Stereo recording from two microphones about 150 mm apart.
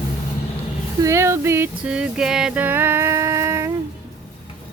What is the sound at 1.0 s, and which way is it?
Female singing, 20° right (ahead or behind).